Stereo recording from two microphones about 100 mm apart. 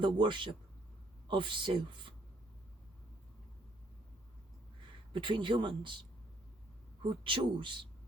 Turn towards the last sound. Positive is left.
turn(degrees=-55)  # may be behind; listen again after turning